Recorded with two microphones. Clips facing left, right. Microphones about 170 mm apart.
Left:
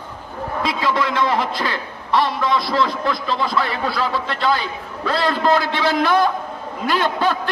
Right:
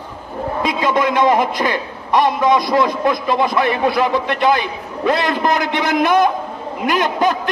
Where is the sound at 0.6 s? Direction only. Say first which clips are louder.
Right 3 dB; 20° right (ahead or behind).